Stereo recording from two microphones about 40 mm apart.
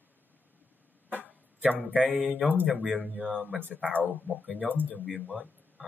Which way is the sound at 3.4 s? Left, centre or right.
Right.